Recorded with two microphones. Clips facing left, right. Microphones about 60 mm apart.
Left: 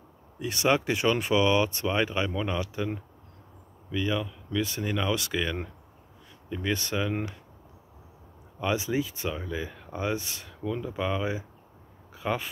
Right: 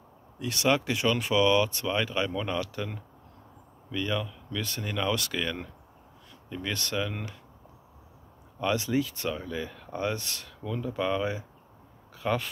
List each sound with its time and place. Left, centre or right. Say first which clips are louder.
0.4 s speech: left 1 dB; left
8.5 s speech: right 1 dB; centre
12.1 s a sound: right 1 dB; centre